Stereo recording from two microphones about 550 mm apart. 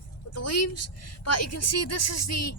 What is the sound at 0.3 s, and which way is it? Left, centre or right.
A woman's voice, left.